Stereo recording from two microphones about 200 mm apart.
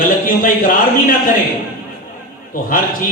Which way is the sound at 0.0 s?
45° left (ahead or behind).